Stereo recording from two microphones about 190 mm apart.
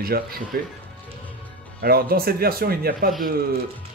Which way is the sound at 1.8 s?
55° right (ahead or behind).